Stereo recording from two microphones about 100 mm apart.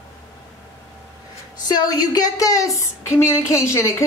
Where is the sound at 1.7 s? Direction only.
40° left (ahead or behind).